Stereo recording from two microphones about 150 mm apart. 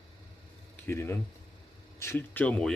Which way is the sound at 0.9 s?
15° left (ahead or behind).